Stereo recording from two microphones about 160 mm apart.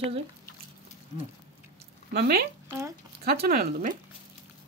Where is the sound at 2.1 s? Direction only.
85° right; by 4.0 s 60° right (ahead or behind).